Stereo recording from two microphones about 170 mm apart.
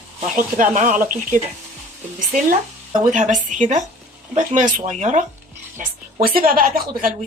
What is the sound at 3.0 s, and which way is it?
Speech, 45° right (ahead or behind).